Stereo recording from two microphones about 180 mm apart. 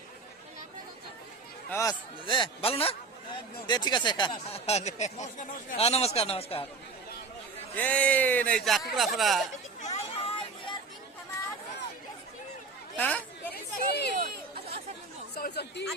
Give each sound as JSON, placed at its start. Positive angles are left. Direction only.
{"t": 1.7, "sound": "a man's voice", "side_deg": 20}
{"t": 7.8, "sound": "a man's voice", "side_deg": 5}
{"t": 9.8, "sound": "a sound", "side_deg": 35}
{"t": 13.0, "sound": "chatter", "side_deg": 10}
{"t": 13.5, "sound": "chatter", "side_deg": 65}
{"t": 15.4, "sound": "speech", "side_deg": 60}